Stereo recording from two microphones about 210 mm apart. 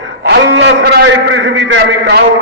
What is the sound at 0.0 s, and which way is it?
A man's voice, 55° right (ahead or behind).